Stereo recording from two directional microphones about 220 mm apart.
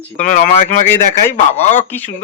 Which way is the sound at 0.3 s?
35° left (ahead or behind).